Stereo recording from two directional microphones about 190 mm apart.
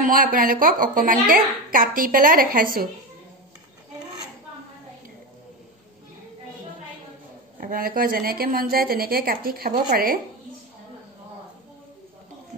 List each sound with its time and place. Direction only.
0.0 s a woman's voice: 45° right (ahead or behind)
7.5 s a woman's voice: 45° right (ahead or behind)